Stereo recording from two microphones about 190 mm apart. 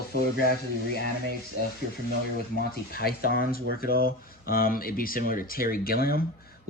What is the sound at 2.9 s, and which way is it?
Speech, 55° left (ahead or behind).